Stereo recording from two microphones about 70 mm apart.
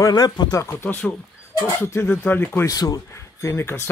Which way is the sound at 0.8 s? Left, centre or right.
Left.